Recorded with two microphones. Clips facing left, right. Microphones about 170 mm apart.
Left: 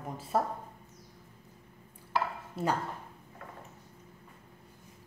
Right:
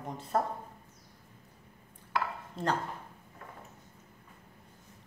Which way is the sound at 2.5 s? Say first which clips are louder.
Even; 10° left (ahead or behind).